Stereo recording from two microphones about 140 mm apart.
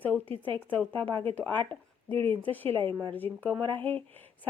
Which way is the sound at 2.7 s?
35° right (ahead or behind).